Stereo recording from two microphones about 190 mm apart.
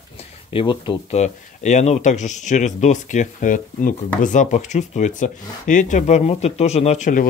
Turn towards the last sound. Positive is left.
turn(degrees=40)  # may be behind; listen again after turning